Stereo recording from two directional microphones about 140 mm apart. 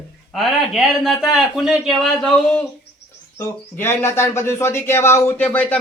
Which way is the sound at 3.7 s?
15° left (ahead or behind).